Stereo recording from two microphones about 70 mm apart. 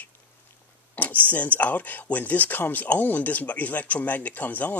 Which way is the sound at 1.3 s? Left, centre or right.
Left.